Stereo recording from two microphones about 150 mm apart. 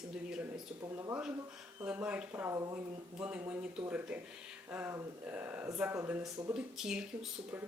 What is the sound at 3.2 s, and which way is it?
A woman's voice, 10° right (ahead or behind).